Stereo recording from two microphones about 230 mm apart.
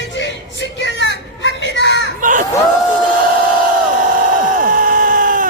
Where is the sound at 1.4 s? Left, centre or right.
Left.